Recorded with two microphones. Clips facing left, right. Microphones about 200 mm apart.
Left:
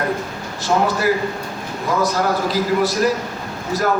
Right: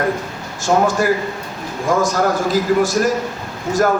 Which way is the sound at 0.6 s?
45° right (ahead or behind).